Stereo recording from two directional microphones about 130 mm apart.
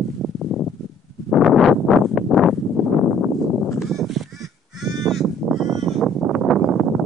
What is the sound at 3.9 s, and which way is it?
Crow, centre (ahead or behind).